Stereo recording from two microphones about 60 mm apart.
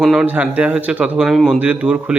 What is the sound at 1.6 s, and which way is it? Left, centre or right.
Speech, right.